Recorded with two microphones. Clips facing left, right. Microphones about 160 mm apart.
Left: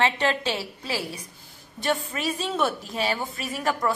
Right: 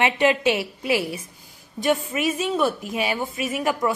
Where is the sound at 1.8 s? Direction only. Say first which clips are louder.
Right 5 dB; 15° right (ahead or behind).